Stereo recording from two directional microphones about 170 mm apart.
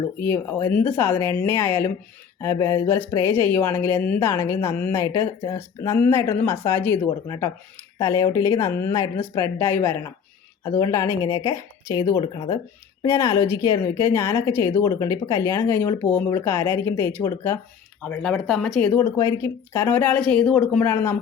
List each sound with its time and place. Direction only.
0.2 s a woman's voice: 15° left (ahead or behind)